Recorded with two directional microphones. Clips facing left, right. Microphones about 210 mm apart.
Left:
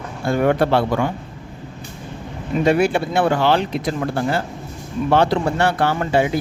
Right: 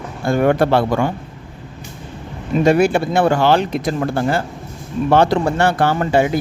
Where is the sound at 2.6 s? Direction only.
45° right (ahead or behind).